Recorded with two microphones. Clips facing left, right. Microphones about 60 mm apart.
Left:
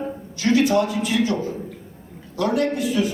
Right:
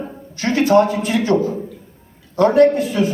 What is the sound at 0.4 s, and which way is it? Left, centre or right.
A man's voice, right.